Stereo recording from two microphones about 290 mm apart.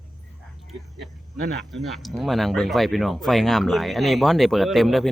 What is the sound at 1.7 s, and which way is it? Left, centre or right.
Speech, centre.